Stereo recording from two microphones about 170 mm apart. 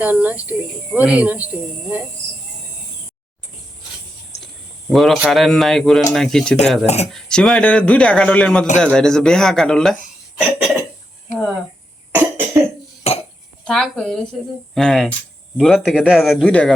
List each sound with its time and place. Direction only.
0.0 s speech: 10° right (ahead or behind)
4.9 s speech: centre (ahead or behind)
6.8 s speech: 40° left (ahead or behind)
7.1 s speech: 5° left (ahead or behind)
12.1 s cough: 10° right (ahead or behind)
13.1 s cough: 40° left (ahead or behind)
13.7 s speech: 5° left (ahead or behind)